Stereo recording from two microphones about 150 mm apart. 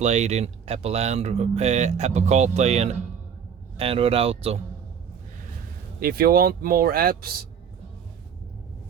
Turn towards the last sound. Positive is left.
turn(degrees=-80)